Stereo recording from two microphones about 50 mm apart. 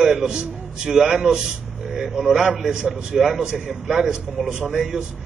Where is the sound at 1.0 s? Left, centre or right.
Right.